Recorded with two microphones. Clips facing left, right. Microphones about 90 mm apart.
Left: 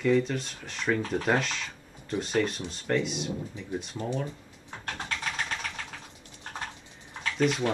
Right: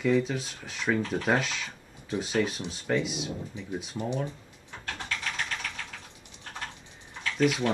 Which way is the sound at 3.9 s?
15° right (ahead or behind).